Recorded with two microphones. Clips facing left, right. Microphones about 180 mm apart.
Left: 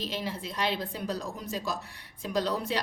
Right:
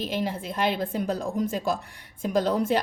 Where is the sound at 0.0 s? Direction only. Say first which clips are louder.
Right 6 dB; 50° right (ahead or behind).